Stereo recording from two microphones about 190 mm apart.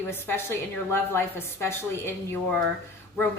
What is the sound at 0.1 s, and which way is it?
A woman's voice, 10° left (ahead or behind).